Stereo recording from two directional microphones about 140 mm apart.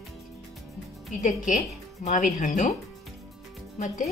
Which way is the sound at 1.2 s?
60° left (ahead or behind).